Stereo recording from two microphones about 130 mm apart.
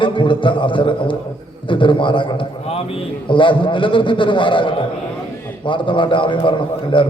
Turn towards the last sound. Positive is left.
turn(degrees=40)  # may be behind; listen again after turning